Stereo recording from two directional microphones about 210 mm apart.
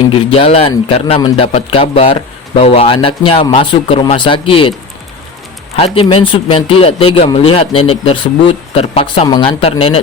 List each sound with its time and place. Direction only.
0.3 s speech: 30° left (ahead or behind)
5.7 s speech: 25° left (ahead or behind)